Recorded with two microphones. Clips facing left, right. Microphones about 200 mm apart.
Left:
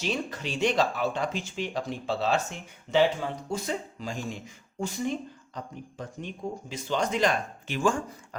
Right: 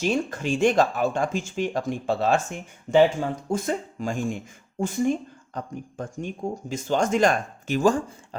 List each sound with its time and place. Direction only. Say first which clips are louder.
0.0 s speech: right 6 dB; 50° right (ahead or behind)